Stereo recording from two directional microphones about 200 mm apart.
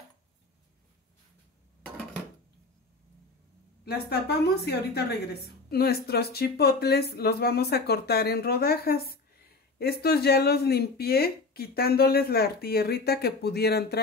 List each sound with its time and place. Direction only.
3.8 s speech: 55° left (ahead or behind)